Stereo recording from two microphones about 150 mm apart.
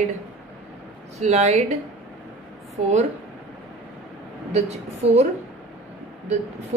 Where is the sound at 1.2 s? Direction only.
50° right (ahead or behind).